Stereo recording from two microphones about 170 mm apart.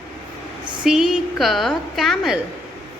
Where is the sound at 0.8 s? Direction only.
5° right (ahead or behind).